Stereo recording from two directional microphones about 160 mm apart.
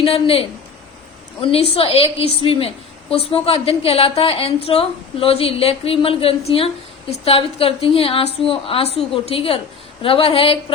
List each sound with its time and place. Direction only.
0.0 s a woman's voice: 35° left (ahead or behind)